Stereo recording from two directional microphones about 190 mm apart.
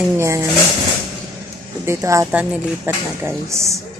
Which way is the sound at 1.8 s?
15° right (ahead or behind).